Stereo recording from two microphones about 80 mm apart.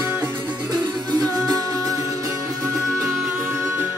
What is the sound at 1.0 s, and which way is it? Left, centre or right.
Music, right.